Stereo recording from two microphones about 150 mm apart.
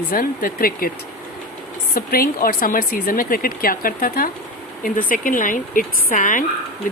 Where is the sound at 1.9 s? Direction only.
75° left (ahead or behind).